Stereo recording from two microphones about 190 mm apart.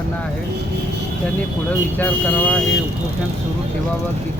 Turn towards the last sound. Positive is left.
turn(degrees=5)  # may be behind; listen again after turning